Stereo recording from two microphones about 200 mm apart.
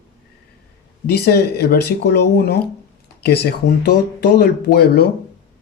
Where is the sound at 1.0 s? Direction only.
55° left (ahead or behind).